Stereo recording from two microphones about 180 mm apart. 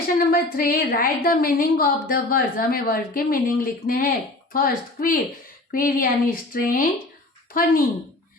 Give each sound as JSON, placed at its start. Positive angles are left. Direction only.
{"t": 0.2, "sound": "a woman's voice", "side_deg": 55}